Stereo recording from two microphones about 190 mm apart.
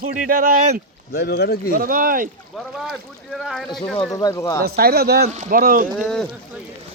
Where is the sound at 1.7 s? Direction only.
50° right (ahead or behind).